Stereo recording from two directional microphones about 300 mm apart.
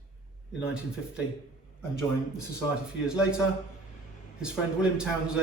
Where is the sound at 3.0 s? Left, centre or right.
Centre.